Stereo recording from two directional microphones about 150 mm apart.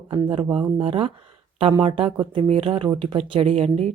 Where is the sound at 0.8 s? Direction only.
40° right (ahead or behind).